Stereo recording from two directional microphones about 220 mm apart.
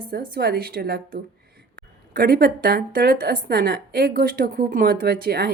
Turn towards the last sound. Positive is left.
turn(degrees=-45)  # may be behind; listen again after turning